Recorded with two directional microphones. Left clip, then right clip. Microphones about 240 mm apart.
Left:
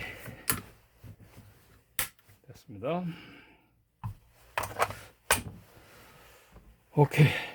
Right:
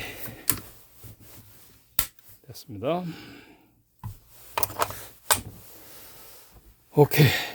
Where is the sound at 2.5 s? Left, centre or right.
Right.